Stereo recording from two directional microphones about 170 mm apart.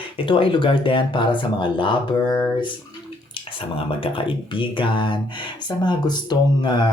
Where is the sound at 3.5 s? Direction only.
30° left (ahead or behind).